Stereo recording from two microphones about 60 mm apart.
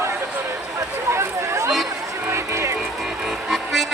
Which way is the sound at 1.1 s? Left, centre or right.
Right.